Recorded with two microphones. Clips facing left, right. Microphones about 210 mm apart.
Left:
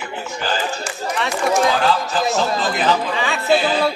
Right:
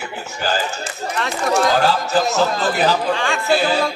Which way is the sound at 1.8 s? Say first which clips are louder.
Right 1 dB; 40° right (ahead or behind).